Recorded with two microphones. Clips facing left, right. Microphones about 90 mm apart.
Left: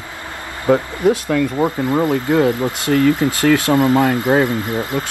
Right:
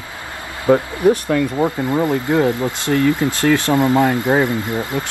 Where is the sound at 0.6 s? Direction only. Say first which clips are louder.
Right 1 dB; 15° right (ahead or behind).